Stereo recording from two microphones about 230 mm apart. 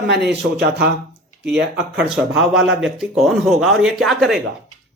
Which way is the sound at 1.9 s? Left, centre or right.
Centre.